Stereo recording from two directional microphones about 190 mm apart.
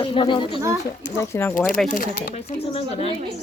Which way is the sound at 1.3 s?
10° left (ahead or behind).